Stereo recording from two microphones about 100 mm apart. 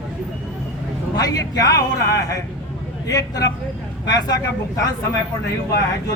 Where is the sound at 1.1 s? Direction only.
40° left (ahead or behind).